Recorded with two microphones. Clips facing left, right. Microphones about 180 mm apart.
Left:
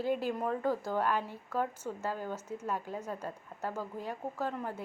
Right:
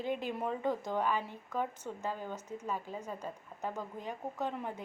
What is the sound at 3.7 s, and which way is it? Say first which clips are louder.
A woman's voice: left 2 dB; 5° left (ahead or behind).